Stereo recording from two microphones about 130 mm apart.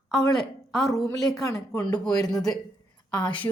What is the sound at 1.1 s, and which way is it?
A woman's voice, centre (ahead or behind).